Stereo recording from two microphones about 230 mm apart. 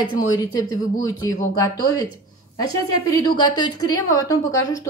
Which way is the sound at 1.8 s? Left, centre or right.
Centre.